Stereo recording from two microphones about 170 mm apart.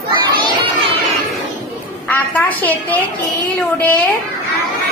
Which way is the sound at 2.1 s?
10° left (ahead or behind).